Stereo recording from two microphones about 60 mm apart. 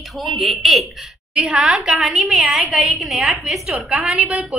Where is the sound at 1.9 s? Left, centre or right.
Centre.